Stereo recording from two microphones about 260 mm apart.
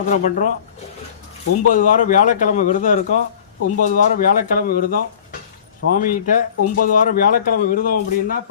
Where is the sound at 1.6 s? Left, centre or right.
Left.